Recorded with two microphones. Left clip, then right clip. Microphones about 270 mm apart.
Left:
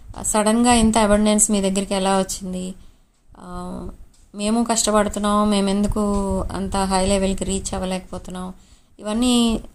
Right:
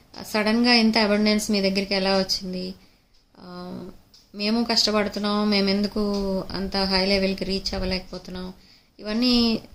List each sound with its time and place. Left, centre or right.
0.2 s speech: centre